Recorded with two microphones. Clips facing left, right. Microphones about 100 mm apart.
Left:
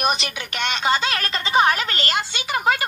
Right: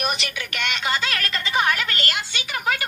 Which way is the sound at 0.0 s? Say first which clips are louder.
Left 4 dB; 25° left (ahead or behind).